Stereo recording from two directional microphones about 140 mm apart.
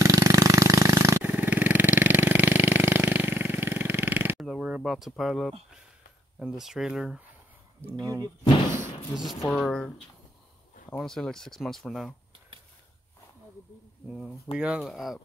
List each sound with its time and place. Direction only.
0.0 s a sound: 20° right (ahead or behind)
4.4 s a sound: 5° right (ahead or behind)
6.4 s speech: 5° right (ahead or behind)
8.1 s speech: 25° right (ahead or behind)
9.1 s speech: centre (ahead or behind)
14.6 s speech: 5° right (ahead or behind)